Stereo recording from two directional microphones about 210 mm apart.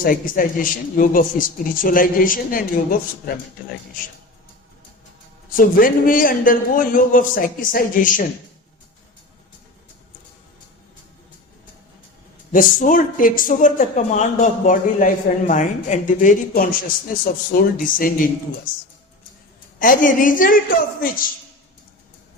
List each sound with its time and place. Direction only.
0.0 s speech: 40° left (ahead or behind)
5.5 s speech: 40° left (ahead or behind)
12.5 s speech: 40° left (ahead or behind)
19.8 s speech: 40° left (ahead or behind)